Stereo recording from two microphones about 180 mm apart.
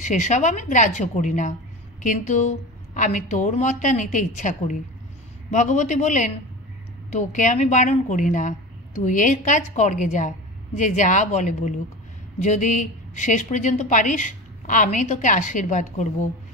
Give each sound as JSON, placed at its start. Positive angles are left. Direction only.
{"t": 0.0, "sound": "a woman's voice", "side_deg": 45}